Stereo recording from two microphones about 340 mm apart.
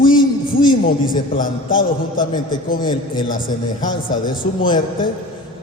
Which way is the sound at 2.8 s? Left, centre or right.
Centre.